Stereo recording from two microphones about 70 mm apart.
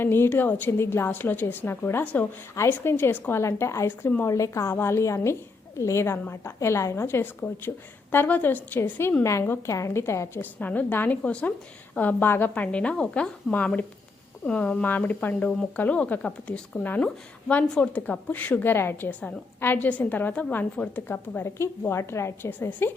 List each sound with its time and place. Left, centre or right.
0.0 s a woman's voice: left
3.4 s a woman's voice: left
9.2 s a woman's voice: left
10.0 s a woman's voice: left
10.4 s a woman's voice: left
11.2 s speech: centre
11.9 s a woman's voice: left
21.4 s a woman's voice: left